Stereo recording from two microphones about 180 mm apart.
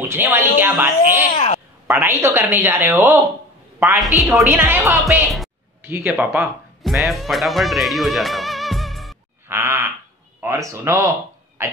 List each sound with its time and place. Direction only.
0.1 s speech: 10° right (ahead or behind)
1.3 s a sound: 40° left (ahead or behind)
1.9 s speech: 15° right (ahead or behind)
4.2 s a woman's voice: centre (ahead or behind)
4.5 s speech: 15° right (ahead or behind)
9.5 s a sound: 15° right (ahead or behind)
10.4 s speech: 15° right (ahead or behind)